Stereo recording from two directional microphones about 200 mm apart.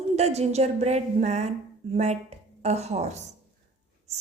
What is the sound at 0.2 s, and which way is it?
A woman's voice, 30° right (ahead or behind).